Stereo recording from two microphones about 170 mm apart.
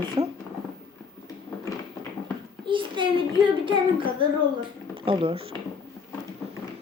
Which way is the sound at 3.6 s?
30° right (ahead or behind).